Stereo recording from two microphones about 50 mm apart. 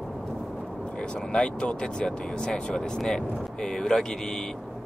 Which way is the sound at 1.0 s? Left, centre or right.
Centre.